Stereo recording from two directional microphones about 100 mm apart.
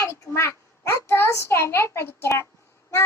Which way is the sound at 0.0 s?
25° left (ahead or behind).